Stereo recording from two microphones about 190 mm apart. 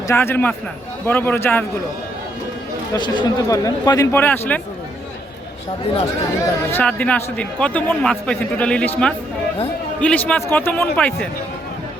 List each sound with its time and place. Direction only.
0.1 s a man's voice: 10° left (ahead or behind)
2.9 s a man's voice: 20° left (ahead or behind)
6.7 s a man's voice: 10° left (ahead or behind)